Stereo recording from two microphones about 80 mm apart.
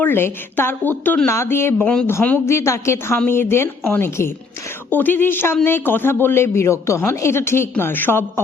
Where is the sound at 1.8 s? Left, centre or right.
Centre.